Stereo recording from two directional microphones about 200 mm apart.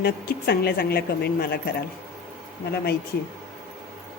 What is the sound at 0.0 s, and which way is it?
Speech, 50° left (ahead or behind).